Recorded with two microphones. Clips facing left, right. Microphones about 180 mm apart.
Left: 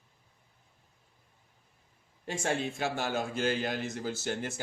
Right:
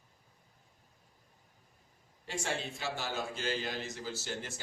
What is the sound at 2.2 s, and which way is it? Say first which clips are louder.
A man's voice: left 5 dB; 50° left (ahead or behind).